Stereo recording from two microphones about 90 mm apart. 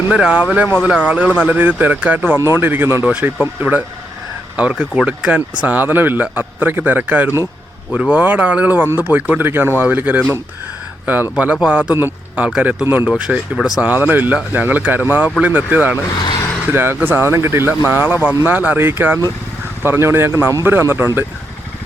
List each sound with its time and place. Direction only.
0.1 s speech: 10° right (ahead or behind)
11.9 s speech: 25° right (ahead or behind)
12.5 s speech: 10° right (ahead or behind)
12.8 s speech: 20° right (ahead or behind); by 13.9 s 5° right (ahead or behind)
13.9 s speech: 20° right (ahead or behind)